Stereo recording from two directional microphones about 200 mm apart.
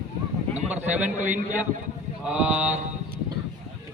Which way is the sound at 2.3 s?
5° right (ahead or behind).